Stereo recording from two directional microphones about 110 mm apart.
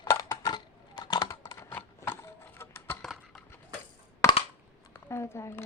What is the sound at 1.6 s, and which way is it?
Typewriter, 20° left (ahead or behind).